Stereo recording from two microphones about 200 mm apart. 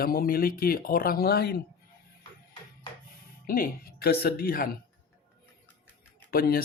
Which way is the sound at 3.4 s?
45° left (ahead or behind).